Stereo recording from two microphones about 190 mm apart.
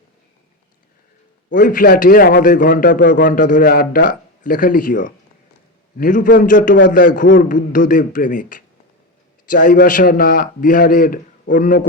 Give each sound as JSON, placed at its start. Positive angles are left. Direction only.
{"t": 1.5, "sound": "speech", "side_deg": 45}